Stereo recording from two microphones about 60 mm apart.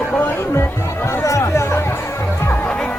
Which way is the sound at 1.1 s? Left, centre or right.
Left.